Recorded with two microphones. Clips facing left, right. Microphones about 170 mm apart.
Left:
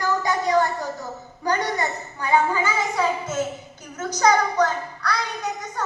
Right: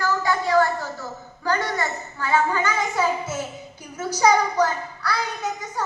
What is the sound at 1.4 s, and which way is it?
A child's voice, 20° left (ahead or behind).